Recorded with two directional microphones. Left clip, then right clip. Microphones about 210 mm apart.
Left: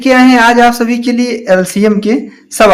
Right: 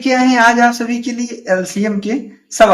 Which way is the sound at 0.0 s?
35° left (ahead or behind).